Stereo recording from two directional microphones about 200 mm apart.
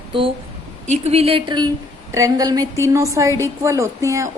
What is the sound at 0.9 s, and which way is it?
A woman's voice, 30° right (ahead or behind).